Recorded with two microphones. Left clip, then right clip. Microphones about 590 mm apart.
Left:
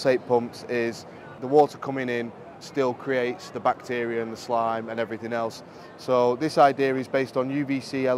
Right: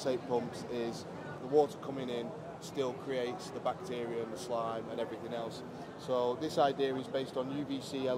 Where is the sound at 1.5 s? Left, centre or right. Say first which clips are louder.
Left 10 dB; left.